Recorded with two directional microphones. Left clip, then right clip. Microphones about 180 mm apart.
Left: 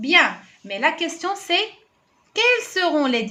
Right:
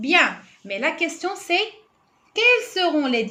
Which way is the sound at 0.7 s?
15° left (ahead or behind).